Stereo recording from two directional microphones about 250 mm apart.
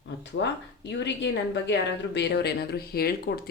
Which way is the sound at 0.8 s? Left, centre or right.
Left.